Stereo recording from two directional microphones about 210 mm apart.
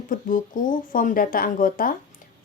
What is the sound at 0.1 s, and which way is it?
Speech, 40° left (ahead or behind).